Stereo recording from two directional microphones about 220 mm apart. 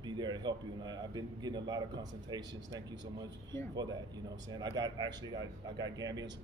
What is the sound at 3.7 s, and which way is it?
A man's voice, 20° right (ahead or behind).